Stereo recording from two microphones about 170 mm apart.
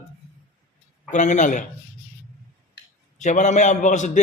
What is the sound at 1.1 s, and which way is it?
Speech, 45° left (ahead or behind).